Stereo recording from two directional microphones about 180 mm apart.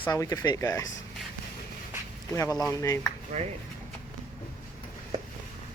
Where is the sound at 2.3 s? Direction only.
20° left (ahead or behind).